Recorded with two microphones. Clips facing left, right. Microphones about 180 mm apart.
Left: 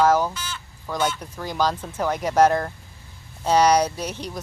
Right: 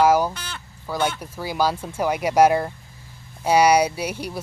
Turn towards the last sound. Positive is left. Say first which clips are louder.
# right 2 dB
turn(degrees=-10)  # may be behind; listen again after turning